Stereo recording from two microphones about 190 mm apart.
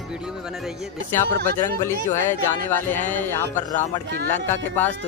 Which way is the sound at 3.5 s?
40° left (ahead or behind).